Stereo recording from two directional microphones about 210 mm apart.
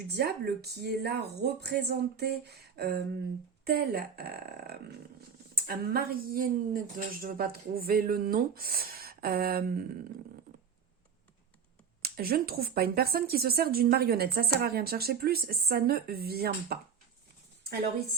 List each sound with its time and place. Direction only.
0.1 s speech: 50° right (ahead or behind)
12.0 s speech: 45° right (ahead or behind)